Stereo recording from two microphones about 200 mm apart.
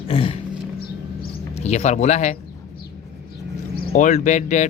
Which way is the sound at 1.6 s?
35° left (ahead or behind).